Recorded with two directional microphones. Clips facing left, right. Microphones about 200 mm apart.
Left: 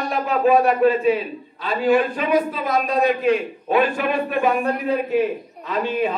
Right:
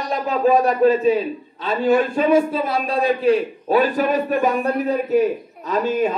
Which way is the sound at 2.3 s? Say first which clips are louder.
Even; 30° right (ahead or behind).